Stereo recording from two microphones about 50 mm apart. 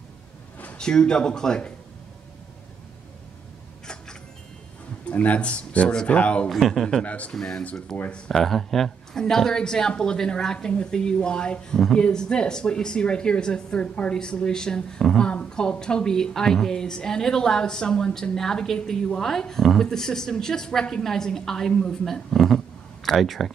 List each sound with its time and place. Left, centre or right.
0.7 s speech: centre
3.8 s a sound: centre
5.0 s speech: left
6.5 s speech: centre
7.1 s speech: left
7.3 s speech: centre
7.9 s speech: left
8.3 s speech: centre